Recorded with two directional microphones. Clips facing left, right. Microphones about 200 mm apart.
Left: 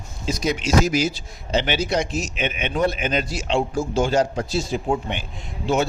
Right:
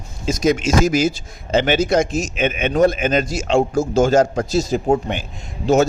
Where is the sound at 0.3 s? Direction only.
45° right (ahead or behind).